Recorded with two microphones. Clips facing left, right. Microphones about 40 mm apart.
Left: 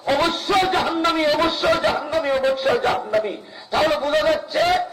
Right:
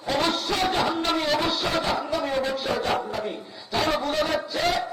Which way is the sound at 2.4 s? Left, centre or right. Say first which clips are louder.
Left 8 dB; left.